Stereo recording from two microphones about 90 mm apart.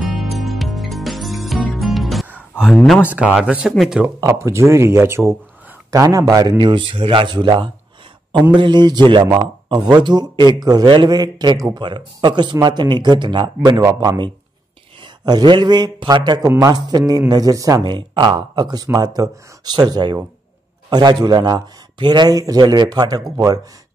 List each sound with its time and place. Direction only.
0.2 s music: centre (ahead or behind)
3.2 s speech: 5° right (ahead or behind)
4.3 s speech: 30° right (ahead or behind)
5.9 s a man's voice: 40° right (ahead or behind)
11.8 s a man's voice: 60° right (ahead or behind); by 14.1 s 40° right (ahead or behind)
15.2 s speech: 55° right (ahead or behind)
16.4 s a man's voice: 40° right (ahead or behind)
17.8 s a man's voice: 60° right (ahead or behind); by 23.6 s 45° right (ahead or behind)